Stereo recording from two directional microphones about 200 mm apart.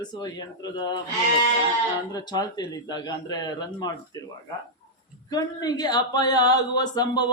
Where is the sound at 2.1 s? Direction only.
20° left (ahead or behind).